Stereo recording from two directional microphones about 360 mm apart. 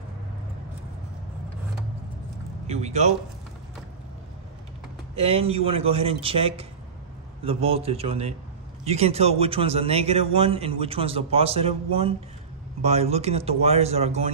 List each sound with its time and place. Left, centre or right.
2.6 s speech: centre
5.1 s speech: centre